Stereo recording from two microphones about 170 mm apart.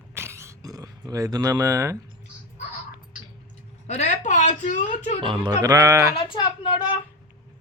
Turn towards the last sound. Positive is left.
turn(degrees=30)  # may be behind; listen again after turning